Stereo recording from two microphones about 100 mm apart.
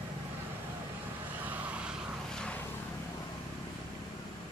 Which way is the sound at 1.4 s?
15° right (ahead or behind).